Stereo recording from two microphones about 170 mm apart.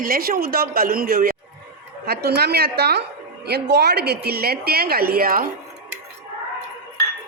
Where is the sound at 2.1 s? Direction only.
70° right (ahead or behind).